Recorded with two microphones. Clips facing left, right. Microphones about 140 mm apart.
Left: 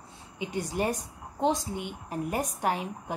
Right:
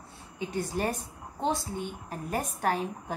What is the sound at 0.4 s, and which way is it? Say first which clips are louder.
Speech: left 1 dB; 15° left (ahead or behind).